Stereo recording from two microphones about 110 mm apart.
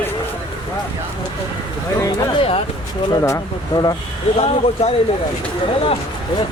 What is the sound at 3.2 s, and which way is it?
Speech, 30° left (ahead or behind).